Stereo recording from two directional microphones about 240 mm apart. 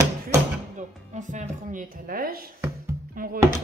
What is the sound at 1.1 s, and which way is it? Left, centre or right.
Speech, right.